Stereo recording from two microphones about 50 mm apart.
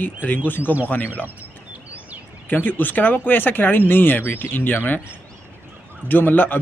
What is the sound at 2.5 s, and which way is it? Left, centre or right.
Speech, left.